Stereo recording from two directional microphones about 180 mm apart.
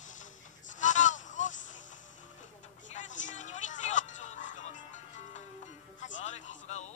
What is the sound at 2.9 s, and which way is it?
Music, 45° left (ahead or behind).